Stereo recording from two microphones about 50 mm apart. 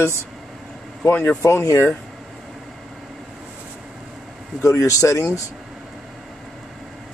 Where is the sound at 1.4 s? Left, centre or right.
Left.